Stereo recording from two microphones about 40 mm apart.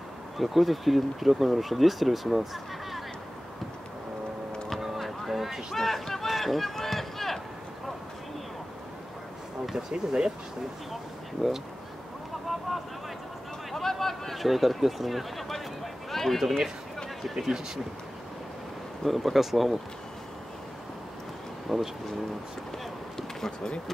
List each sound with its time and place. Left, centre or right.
0.4 s speech: centre
4.6 s vehicle: centre
5.8 s run: centre
9.8 s speech: centre
12.4 s a sound: centre
13.7 s speech: centre
19.0 s speech: centre
21.7 s speech: centre
23.1 s a sound: centre